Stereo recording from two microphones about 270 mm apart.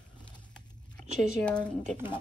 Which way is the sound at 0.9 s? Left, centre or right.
Centre.